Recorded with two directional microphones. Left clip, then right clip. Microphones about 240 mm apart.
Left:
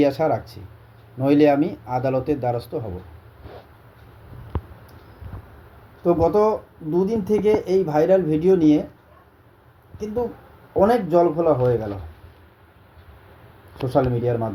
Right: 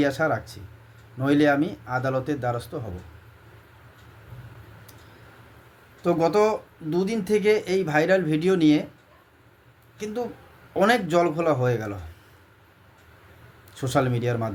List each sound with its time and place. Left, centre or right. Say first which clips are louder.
0.0 s speech: left 4 dB; centre
6.1 s speech: left 2 dB; centre
10.8 s speech: left 3 dB; centre
13.8 s speech: left 4 dB; right